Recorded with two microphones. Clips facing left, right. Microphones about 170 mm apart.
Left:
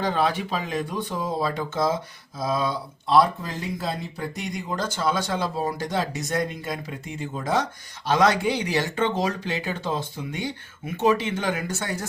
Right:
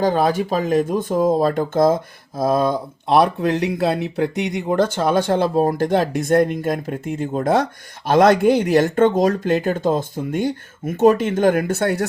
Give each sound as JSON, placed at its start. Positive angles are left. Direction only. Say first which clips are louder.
{"t": 0.0, "sound": "speech", "louder": "right 6 dB", "side_deg": -45}